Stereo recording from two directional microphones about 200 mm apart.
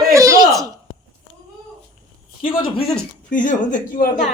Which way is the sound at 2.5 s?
25° left (ahead or behind).